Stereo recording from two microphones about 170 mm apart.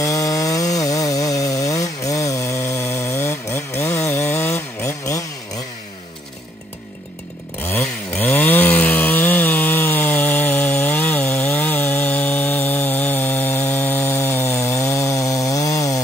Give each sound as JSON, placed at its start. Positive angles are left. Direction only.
{"t": 0.0, "sound": "chainsaw", "side_deg": 20}
{"t": 7.6, "sound": "chainsaw", "side_deg": 10}